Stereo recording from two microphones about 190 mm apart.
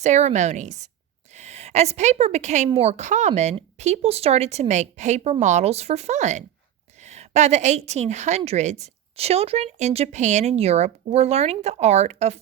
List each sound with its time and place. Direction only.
0.0 s a woman's voice: 35° right (ahead or behind)